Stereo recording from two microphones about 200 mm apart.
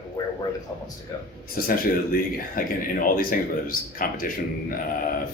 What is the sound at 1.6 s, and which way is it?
Speech, 45° left (ahead or behind).